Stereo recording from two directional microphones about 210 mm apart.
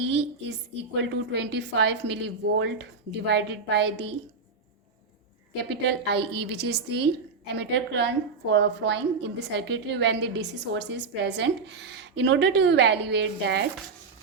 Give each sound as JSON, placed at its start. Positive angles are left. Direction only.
{"t": 0.1, "sound": "a woman's voice", "side_deg": -55}
{"t": 5.9, "sound": "a woman's voice", "side_deg": -55}